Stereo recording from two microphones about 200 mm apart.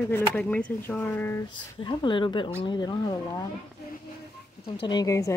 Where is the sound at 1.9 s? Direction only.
25° left (ahead or behind).